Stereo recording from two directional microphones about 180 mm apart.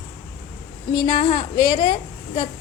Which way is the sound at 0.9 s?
30° left (ahead or behind).